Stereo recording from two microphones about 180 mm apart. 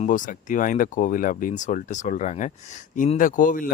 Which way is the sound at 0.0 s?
45° left (ahead or behind).